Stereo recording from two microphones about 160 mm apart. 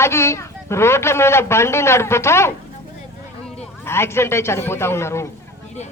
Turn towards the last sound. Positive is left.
turn(degrees=15)  # may be behind; listen again after turning